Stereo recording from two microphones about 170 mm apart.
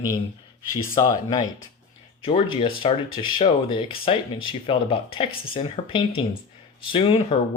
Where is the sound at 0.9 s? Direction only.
25° left (ahead or behind).